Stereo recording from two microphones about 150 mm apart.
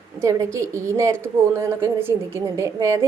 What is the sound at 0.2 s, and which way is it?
A woman's voice, 20° right (ahead or behind).